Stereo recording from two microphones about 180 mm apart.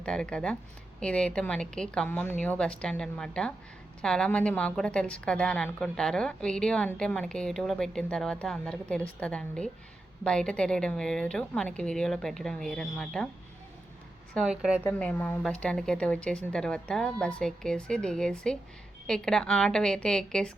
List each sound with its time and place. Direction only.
0.0 s a woman's voice: 5° left (ahead or behind)
14.3 s a woman's voice: 5° right (ahead or behind)
14.8 s a woman's voice: 5° left (ahead or behind)